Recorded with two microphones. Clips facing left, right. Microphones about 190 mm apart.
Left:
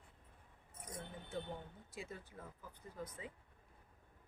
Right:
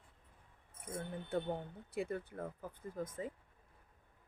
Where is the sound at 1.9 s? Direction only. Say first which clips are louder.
Right 12 dB; 60° right (ahead or behind).